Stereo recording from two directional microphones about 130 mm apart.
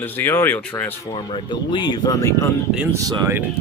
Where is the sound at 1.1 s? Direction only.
35° left (ahead or behind).